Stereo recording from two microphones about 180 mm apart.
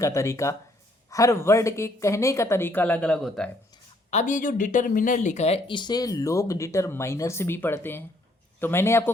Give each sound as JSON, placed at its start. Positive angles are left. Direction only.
{"t": 0.0, "sound": "a woman's voice", "side_deg": 15}
{"t": 4.1, "sound": "a woman's voice", "side_deg": 40}